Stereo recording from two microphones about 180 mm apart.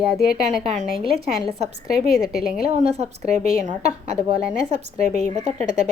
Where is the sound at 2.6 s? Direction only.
35° right (ahead or behind).